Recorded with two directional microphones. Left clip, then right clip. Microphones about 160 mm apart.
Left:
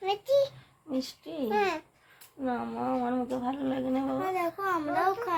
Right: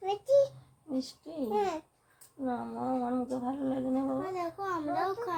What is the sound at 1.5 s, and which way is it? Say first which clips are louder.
Babbling: left 3 dB; 20° right (ahead or behind).